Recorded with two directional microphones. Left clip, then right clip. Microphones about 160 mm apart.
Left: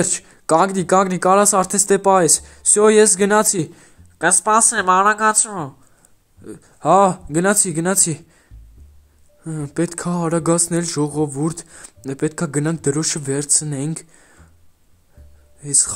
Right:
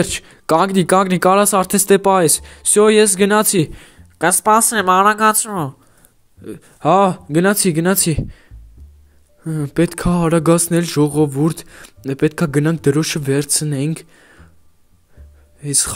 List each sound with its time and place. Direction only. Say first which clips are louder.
0.0 s speech: right 2 dB; 25° right (ahead or behind)
6.4 s speech: right 2 dB; 20° right (ahead or behind)
13.9 s a sound: right 2 dB; 20° right (ahead or behind)
15.6 s speech: even; 25° right (ahead or behind)